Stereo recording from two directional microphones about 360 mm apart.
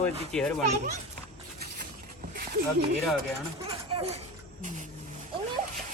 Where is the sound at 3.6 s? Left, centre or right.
Centre.